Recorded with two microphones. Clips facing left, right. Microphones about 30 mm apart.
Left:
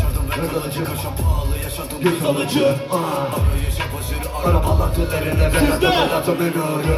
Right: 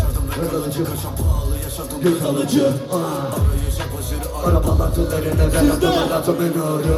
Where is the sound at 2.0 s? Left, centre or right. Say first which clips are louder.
Even; left.